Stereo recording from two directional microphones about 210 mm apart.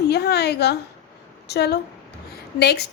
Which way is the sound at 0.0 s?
50° left (ahead or behind).